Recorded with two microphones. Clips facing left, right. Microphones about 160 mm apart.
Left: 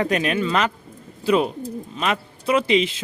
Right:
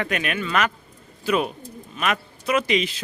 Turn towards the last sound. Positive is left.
turn(degrees=25)  # may be behind; listen again after turning